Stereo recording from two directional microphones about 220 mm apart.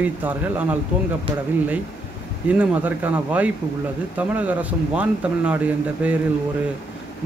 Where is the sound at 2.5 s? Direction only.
5° right (ahead or behind).